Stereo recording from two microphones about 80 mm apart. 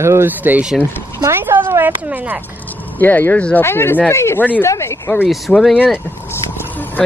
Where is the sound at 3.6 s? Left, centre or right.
Left.